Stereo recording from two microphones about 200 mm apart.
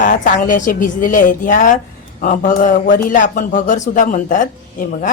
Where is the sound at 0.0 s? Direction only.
40° left (ahead or behind).